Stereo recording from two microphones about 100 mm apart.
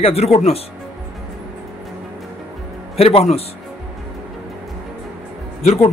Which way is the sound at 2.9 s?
80° left.